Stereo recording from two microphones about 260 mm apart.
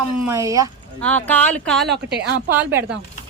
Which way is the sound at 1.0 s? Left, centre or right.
Centre.